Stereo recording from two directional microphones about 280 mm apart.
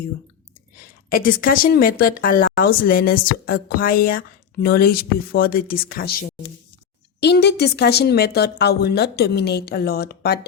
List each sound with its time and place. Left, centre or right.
1.1 s a woman's voice: left